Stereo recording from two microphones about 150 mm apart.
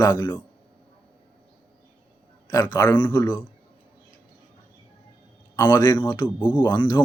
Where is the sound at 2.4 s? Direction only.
25° left (ahead or behind).